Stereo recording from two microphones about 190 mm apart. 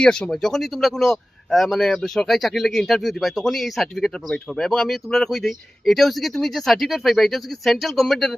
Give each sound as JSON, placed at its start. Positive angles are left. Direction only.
{"t": 0.0, "sound": "speech", "side_deg": 5}